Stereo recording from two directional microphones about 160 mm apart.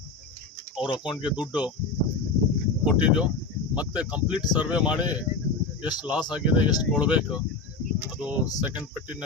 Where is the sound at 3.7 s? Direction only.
5° right (ahead or behind).